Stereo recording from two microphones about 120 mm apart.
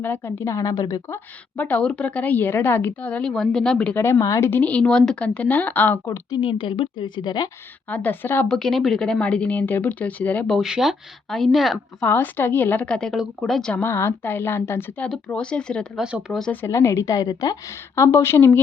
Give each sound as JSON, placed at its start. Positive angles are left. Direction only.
{"t": 0.0, "sound": "a woman's voice", "side_deg": 20}
{"t": 1.5, "sound": "speech", "side_deg": 15}
{"t": 4.0, "sound": "speech", "side_deg": 25}
{"t": 6.3, "sound": "a woman's voice", "side_deg": 40}
{"t": 7.9, "sound": "speech", "side_deg": 15}
{"t": 8.4, "sound": "speech", "side_deg": 5}
{"t": 10.5, "sound": "a woman's voice", "side_deg": -5}
{"t": 12.0, "sound": "speech", "side_deg": 15}
{"t": 13.8, "sound": "a woman's voice", "side_deg": 20}
{"t": 16.5, "sound": "a woman's voice", "side_deg": 20}